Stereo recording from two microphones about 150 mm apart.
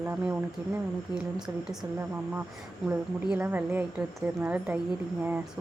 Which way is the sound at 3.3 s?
10° right (ahead or behind).